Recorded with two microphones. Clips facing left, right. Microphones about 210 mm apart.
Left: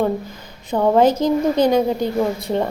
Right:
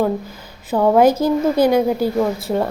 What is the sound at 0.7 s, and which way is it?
A woman's voice, 5° right (ahead or behind).